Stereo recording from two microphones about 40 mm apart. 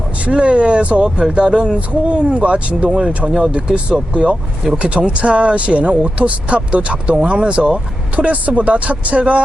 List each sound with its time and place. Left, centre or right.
0.3 s speech: right
3.2 s speech: centre
4.8 s speech: right